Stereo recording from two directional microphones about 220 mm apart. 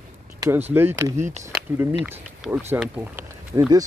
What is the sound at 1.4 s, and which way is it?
Speech, 10° right (ahead or behind).